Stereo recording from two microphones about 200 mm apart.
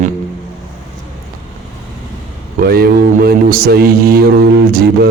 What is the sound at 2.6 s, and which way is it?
Speech, 50° right (ahead or behind).